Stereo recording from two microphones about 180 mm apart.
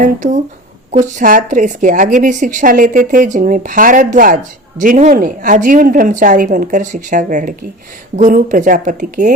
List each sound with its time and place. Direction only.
0.0 s a woman's voice: 40° right (ahead or behind)